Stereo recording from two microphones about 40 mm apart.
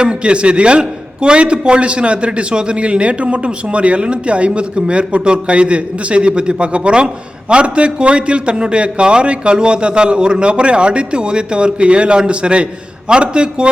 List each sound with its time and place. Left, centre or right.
0.0 s a man's voice: right